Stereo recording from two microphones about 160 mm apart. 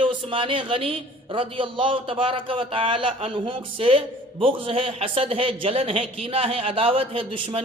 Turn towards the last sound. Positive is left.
turn(degrees=-35)  # may be behind; listen again after turning